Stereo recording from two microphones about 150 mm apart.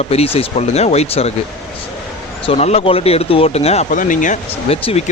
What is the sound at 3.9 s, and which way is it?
Speech, 60° left (ahead or behind).